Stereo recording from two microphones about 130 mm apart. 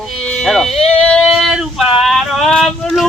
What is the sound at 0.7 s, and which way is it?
Speech, 50° left (ahead or behind).